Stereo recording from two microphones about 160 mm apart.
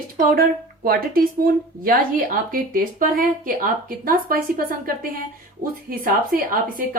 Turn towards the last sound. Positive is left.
turn(degrees=-60)  # may be behind; listen again after turning